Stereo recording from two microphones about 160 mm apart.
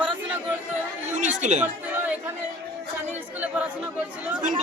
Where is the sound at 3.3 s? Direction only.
10° right (ahead or behind).